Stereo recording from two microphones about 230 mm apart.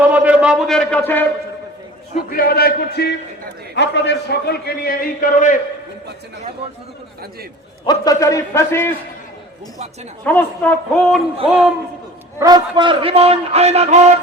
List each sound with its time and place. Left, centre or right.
0.0 s a sound: centre
2.3 s a man's voice: left
7.9 s a man's voice: centre
10.2 s a man's voice: centre
12.4 s a man's voice: centre